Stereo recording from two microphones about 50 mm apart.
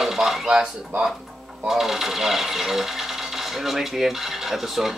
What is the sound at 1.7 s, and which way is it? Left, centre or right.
Speech, centre.